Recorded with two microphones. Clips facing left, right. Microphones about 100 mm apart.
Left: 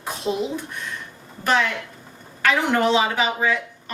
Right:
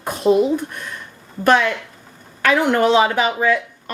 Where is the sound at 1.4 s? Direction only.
50° right (ahead or behind).